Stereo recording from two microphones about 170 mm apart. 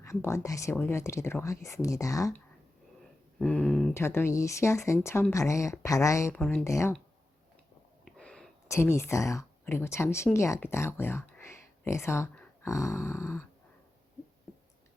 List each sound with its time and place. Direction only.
0.0 s speech: 15° left (ahead or behind)
3.3 s a sound: 5° left (ahead or behind)
3.9 s speech: 15° left (ahead or behind)
6.4 s speech: 5° left (ahead or behind)
6.7 s speech: 15° left (ahead or behind)
8.0 s a sound: 5° left (ahead or behind)
8.6 s speech: 15° left (ahead or behind)